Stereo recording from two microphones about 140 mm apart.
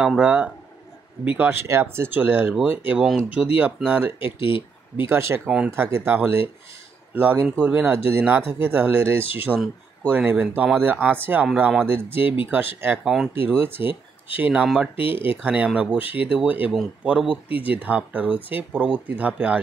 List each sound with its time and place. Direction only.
0.0 s speech: 5° right (ahead or behind)
4.4 s speech: 40° left (ahead or behind)
4.9 s speech: 20° right (ahead or behind)
13.0 s speech: 5° right (ahead or behind)
13.3 s speech: 15° right (ahead or behind)
15.0 s speech: 40° left (ahead or behind)
15.2 s speech: 10° right (ahead or behind)